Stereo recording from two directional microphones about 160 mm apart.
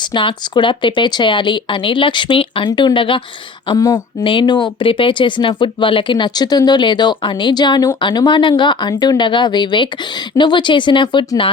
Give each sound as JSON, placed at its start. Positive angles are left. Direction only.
{"t": 0.1, "sound": "speech", "side_deg": 30}